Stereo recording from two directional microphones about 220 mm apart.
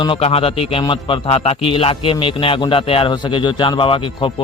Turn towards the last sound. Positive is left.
turn(degrees=25)  # may be behind; listen again after turning